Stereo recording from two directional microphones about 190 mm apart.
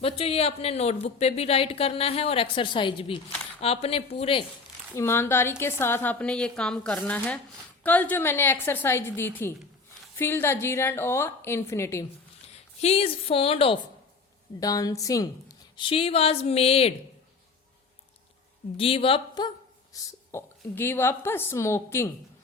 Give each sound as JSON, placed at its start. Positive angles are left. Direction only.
{"t": 0.0, "sound": "a woman's voice", "side_deg": 30}
{"t": 4.9, "sound": "a woman's voice", "side_deg": 15}
{"t": 12.8, "sound": "a woman's voice", "side_deg": 30}
{"t": 14.6, "sound": "a woman's voice", "side_deg": 20}
{"t": 18.8, "sound": "a woman's voice", "side_deg": 30}
{"t": 19.9, "sound": "a woman's voice", "side_deg": 15}